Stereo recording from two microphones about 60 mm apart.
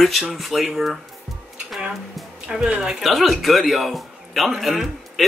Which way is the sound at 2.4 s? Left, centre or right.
Centre.